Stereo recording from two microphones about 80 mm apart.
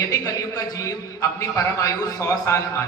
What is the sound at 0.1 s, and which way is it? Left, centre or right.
A man's voice, left.